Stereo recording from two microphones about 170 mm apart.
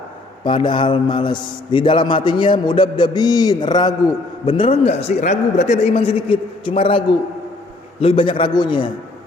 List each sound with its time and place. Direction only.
0.4 s a man's voice: 30° left (ahead or behind)